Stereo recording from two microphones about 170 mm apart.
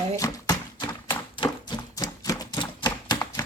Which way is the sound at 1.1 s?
30° left (ahead or behind).